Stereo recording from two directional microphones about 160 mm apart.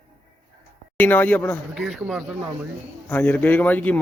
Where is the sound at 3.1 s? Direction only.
10° left (ahead or behind).